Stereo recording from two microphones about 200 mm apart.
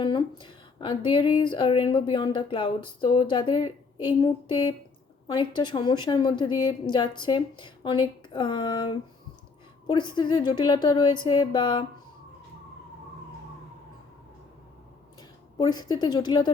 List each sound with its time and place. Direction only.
0.0 s a woman's voice: 25° left (ahead or behind)
15.5 s a woman's voice: 20° left (ahead or behind)